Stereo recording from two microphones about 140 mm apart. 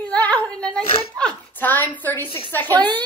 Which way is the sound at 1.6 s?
15° left (ahead or behind).